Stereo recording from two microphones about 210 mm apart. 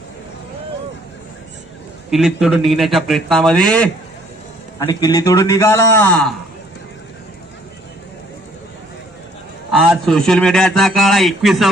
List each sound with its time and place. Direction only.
2.0 s a man's voice: centre (ahead or behind)
4.8 s a man's voice: 20° left (ahead or behind)
9.7 s a man's voice: 5° left (ahead or behind)